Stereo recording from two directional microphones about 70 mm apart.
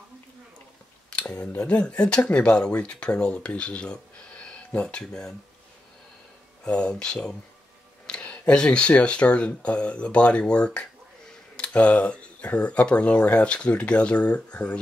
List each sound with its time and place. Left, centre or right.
1.1 s speech: centre
6.6 s speech: centre
11.5 s tick-tock: centre
12.4 s speech: centre